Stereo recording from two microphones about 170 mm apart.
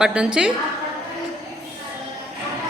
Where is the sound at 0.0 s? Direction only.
5° right (ahead or behind).